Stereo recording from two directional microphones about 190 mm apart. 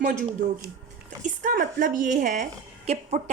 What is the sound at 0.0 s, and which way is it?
A woman's voice, 40° right (ahead or behind).